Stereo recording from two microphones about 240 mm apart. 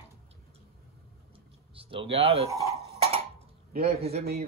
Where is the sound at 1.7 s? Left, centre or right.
Right.